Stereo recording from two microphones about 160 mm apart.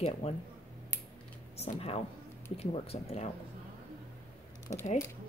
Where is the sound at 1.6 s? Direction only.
40° left (ahead or behind).